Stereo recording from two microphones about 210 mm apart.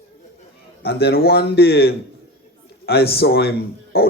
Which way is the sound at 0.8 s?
50° left (ahead or behind).